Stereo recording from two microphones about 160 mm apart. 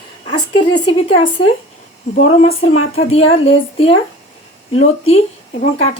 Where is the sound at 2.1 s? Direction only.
50° left (ahead or behind).